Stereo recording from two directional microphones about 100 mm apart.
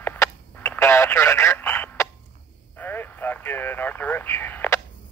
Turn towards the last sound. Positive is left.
turn(degrees=20)  # may be behind; listen again after turning